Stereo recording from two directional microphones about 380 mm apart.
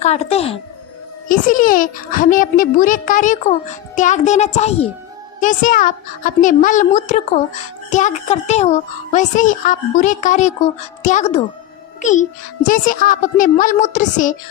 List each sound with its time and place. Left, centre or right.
0.0 s a woman's voice: centre